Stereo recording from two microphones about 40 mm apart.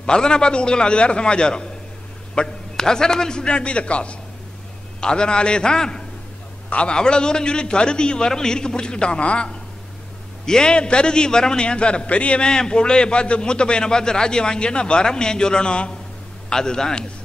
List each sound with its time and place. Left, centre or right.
0.0 s a man's voice: left
12.4 s a man's voice: left